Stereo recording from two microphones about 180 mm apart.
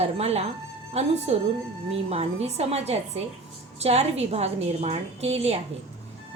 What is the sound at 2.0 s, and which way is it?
A woman's voice, 35° right (ahead or behind).